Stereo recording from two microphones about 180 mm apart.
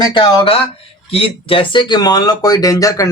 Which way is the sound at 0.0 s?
25° left (ahead or behind).